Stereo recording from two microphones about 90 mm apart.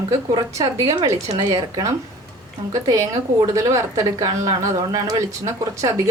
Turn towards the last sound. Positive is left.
turn(degrees=-35)  # may be behind; listen again after turning